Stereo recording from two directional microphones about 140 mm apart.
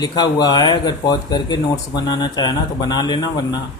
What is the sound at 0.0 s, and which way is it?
Speech, 30° left (ahead or behind).